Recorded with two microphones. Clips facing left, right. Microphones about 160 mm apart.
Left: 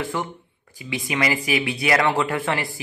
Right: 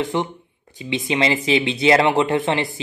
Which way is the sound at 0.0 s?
20° right (ahead or behind).